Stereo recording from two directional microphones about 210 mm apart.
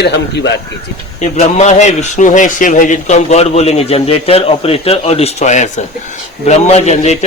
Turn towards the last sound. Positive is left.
turn(degrees=30)  # may be behind; listen again after turning